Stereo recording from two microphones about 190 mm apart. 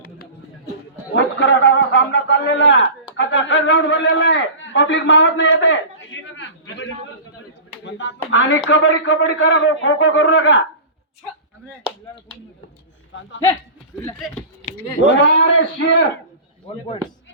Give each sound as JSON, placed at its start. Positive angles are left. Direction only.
{"t": 1.1, "sound": "a man's voice", "side_deg": 80}
{"t": 15.1, "sound": "a man's voice", "side_deg": 75}